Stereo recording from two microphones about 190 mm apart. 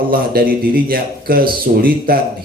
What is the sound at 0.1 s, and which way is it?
A man's voice, 50° right (ahead or behind).